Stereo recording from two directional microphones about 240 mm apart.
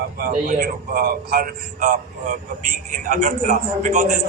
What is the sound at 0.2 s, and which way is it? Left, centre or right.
A man's voice, right.